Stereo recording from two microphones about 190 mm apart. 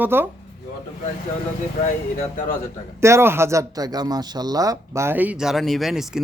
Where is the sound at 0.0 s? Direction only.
10° right (ahead or behind).